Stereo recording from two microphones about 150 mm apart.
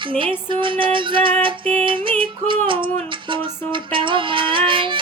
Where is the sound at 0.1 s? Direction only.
35° right (ahead or behind).